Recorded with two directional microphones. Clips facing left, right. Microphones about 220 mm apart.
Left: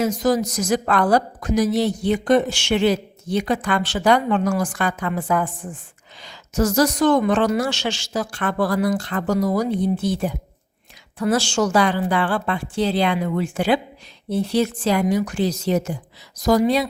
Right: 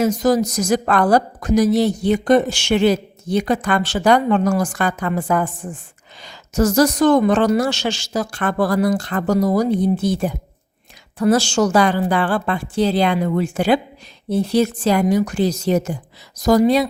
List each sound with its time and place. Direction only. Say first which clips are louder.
0.0 s a woman's voice: right 3 dB; 40° right (ahead or behind)